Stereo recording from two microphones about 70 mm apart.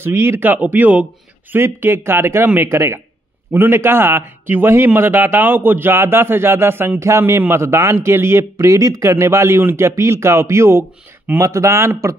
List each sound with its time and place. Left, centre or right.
0.0 s a man's voice: right